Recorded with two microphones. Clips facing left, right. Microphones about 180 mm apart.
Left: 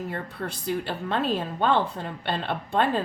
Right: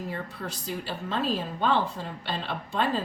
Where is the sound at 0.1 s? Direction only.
60° left (ahead or behind).